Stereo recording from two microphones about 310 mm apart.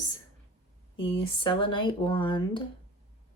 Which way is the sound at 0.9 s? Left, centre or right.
Centre.